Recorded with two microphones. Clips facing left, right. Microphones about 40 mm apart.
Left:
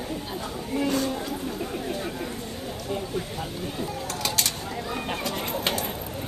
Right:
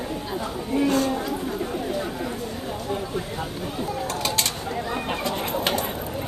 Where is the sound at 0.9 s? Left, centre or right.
Right.